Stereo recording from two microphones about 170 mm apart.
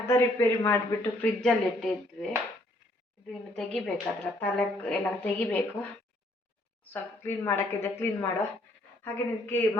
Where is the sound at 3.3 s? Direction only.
5° left (ahead or behind).